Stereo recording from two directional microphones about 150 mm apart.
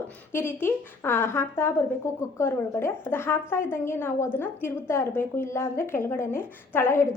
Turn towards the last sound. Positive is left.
turn(degrees=15)  # may be behind; listen again after turning